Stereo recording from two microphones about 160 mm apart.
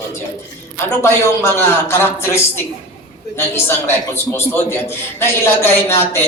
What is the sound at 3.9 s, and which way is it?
A man's voice, 15° left (ahead or behind).